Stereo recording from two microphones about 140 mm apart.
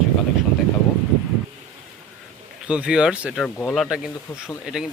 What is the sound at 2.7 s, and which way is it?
Speech, 5° right (ahead or behind).